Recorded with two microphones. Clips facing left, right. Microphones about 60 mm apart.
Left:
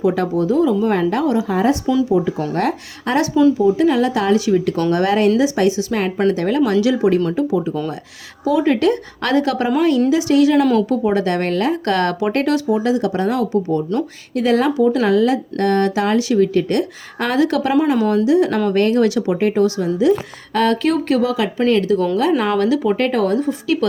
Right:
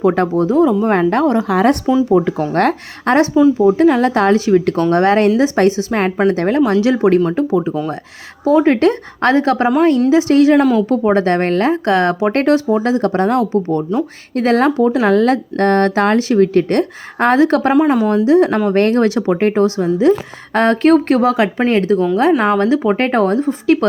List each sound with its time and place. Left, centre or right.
0.0 s a woman's voice: right
1.5 s speech: right
2.0 s a woman's voice: right
6.9 s speech: right
7.3 s a woman's voice: right
10.6 s a woman's voice: centre
10.8 s a woman's voice: right
12.3 s a woman's voice: right